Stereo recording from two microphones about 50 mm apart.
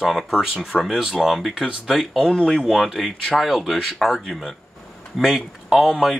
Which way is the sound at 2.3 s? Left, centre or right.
Centre.